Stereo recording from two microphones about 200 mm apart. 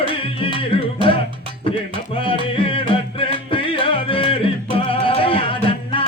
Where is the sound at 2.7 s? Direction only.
25° left (ahead or behind).